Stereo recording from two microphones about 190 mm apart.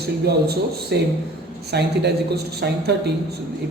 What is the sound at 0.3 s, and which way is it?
A man's voice, 60° right (ahead or behind).